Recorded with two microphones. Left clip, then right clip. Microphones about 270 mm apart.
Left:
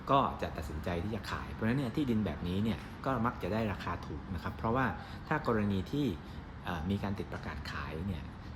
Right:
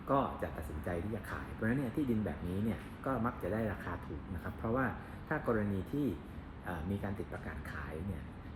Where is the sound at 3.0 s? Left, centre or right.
Left.